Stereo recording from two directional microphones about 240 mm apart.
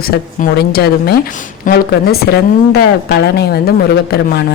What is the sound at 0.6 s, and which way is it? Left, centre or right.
A woman's voice, left.